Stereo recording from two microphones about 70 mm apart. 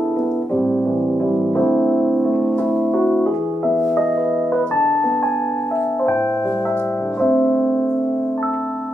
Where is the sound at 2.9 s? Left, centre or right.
Centre.